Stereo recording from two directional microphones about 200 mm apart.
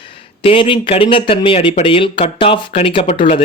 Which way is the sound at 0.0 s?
25° left (ahead or behind).